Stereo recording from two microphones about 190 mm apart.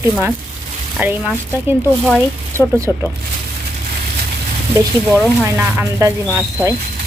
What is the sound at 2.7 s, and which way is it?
Speech, 15° right (ahead or behind).